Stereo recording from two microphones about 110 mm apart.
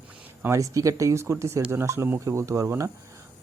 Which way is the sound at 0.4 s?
30° right (ahead or behind).